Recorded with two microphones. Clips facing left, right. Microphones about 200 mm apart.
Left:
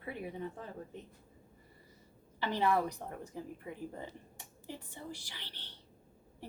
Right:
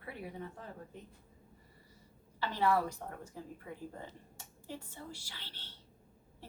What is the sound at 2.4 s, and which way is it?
A woman's voice, 20° left (ahead or behind).